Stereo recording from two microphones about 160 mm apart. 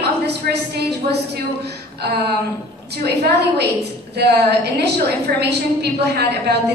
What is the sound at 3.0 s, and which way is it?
A woman's voice, 90° right.